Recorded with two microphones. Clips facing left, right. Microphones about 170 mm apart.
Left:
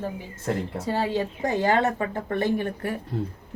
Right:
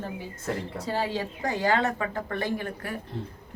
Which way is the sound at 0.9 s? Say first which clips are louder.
Left 3 dB; 25° left (ahead or behind).